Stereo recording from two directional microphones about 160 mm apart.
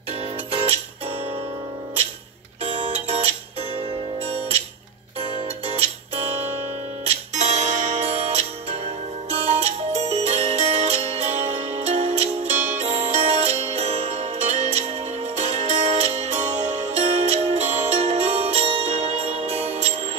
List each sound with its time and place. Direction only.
0.5 s music: 40° right (ahead or behind)
2.6 s music: 40° right (ahead or behind)
7.1 s music: 45° right (ahead or behind)